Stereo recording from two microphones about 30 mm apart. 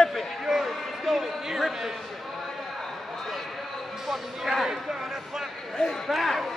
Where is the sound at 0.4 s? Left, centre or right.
Centre.